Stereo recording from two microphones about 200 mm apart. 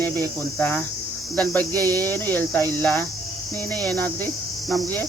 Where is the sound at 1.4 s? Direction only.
10° left (ahead or behind).